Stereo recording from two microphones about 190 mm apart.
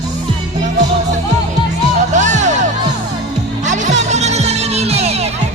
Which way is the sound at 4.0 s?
35° right (ahead or behind).